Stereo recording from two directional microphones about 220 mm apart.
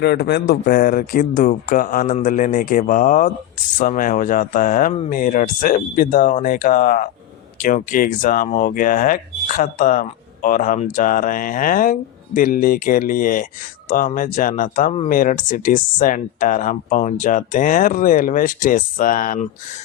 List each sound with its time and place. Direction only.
0.0 s speech: 45° left (ahead or behind)